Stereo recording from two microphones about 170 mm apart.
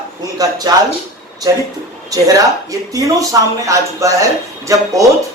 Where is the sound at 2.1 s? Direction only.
20° right (ahead or behind).